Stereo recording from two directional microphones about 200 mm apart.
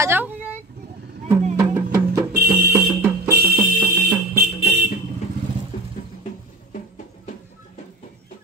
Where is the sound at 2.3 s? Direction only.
50° right (ahead or behind).